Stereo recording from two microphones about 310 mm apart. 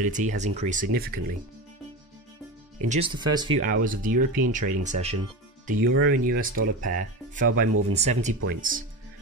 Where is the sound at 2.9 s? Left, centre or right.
Centre.